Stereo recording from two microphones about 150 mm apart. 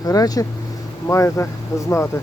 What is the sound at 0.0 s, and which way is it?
Speech, 25° left (ahead or behind).